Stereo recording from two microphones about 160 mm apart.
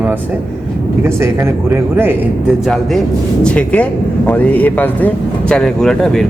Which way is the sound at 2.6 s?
Centre (ahead or behind).